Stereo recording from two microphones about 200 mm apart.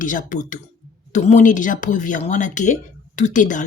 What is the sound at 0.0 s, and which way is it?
Speech, 40° left (ahead or behind).